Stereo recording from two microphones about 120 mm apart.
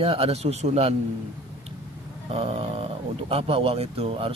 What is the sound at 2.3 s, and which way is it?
Speech, 55° right (ahead or behind).